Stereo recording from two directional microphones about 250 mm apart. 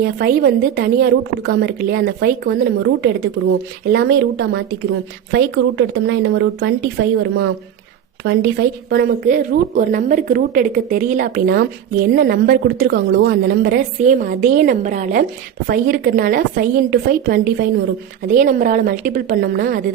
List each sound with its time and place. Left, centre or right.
0.0 s a woman's voice: right